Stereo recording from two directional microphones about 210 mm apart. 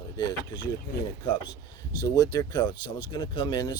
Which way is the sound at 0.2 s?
20° left (ahead or behind).